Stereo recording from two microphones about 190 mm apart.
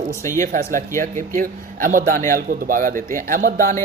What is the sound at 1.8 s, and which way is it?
Speech, 45° right (ahead or behind).